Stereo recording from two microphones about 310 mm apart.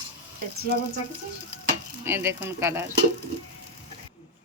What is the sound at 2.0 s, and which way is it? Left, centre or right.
Speech, centre.